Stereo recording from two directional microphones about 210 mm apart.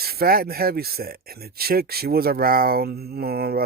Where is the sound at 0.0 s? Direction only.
45° right (ahead or behind).